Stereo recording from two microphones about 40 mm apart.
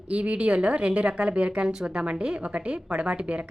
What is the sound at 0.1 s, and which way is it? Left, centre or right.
A woman's voice, right.